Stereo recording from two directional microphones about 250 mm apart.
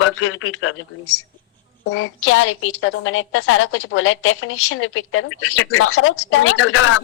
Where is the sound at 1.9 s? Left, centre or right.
Left.